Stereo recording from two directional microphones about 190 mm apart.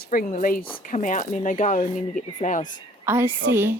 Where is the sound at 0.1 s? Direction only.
45° left (ahead or behind).